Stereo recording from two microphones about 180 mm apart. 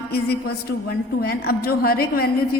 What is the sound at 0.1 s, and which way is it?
A woman's voice, 60° left (ahead or behind).